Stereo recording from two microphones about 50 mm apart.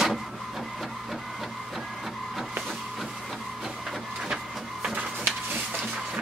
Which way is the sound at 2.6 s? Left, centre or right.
Centre.